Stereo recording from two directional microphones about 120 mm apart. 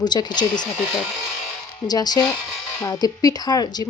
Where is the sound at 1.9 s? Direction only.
35° left (ahead or behind).